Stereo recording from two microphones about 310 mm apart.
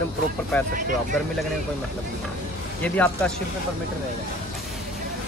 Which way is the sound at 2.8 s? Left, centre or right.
Centre.